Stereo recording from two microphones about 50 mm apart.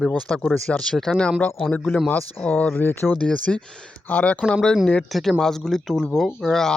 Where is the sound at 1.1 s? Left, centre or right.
Centre.